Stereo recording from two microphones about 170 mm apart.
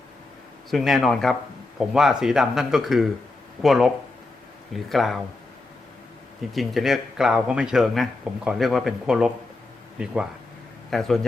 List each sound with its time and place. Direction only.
0.7 s a man's voice: centre (ahead or behind)
6.5 s a man's voice: centre (ahead or behind)
10.9 s a man's voice: centre (ahead or behind)